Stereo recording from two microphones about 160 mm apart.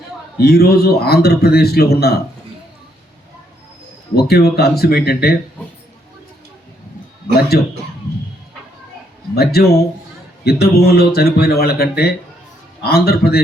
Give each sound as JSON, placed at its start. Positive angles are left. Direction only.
{"t": 0.3, "sound": "a man's voice", "side_deg": 80}
{"t": 4.1, "sound": "a man's voice", "side_deg": 80}
{"t": 7.5, "sound": "a man's voice", "side_deg": 75}
{"t": 9.3, "sound": "a man's voice", "side_deg": 80}